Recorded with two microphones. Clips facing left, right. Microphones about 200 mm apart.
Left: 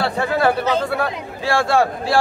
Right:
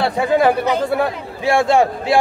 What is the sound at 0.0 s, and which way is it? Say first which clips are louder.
A man's voice: right 3 dB; 20° right (ahead or behind).